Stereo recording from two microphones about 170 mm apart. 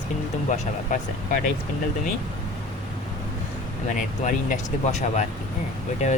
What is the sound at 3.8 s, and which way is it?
Speech, 45° left (ahead or behind).